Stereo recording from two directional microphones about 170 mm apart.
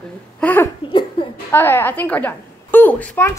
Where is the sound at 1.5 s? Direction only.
10° left (ahead or behind).